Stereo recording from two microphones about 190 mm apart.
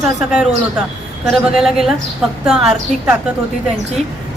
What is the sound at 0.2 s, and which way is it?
A woman's voice, 5° right (ahead or behind).